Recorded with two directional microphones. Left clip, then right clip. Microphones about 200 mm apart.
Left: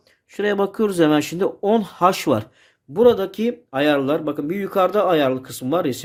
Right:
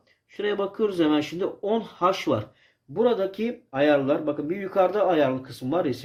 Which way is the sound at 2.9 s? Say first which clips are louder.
Left 7 dB; 45° left (ahead or behind).